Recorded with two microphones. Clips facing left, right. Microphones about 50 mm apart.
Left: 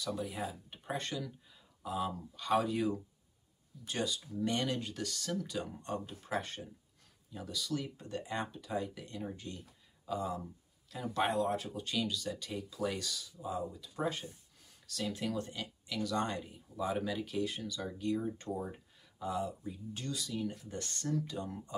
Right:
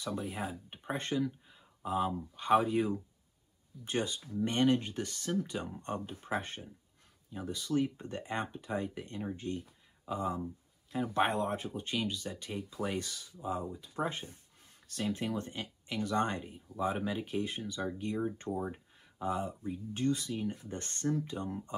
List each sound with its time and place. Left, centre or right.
0.0 s speech: right